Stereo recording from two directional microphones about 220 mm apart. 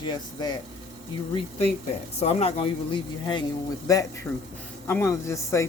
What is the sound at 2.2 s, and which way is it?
Speech, 30° left (ahead or behind).